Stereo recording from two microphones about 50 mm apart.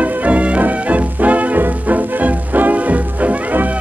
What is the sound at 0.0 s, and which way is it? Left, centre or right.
Music, right.